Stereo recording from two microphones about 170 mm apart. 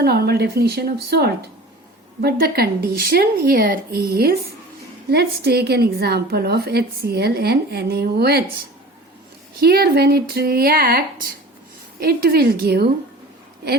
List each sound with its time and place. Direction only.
0.0 s a woman's voice: 65° right (ahead or behind)
9.6 s a woman's voice: 65° right (ahead or behind)